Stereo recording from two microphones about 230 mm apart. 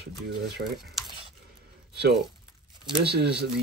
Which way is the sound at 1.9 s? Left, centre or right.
Right.